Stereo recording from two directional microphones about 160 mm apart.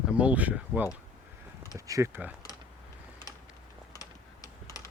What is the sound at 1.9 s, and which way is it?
Speech, 15° right (ahead or behind).